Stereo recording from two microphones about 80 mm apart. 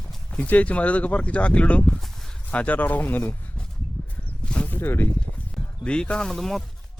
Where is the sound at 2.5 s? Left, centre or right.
Centre.